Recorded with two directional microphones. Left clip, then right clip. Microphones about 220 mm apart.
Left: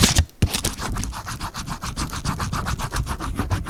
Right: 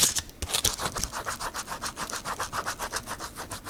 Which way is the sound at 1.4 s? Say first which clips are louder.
Left 2 dB; 20° left (ahead or behind).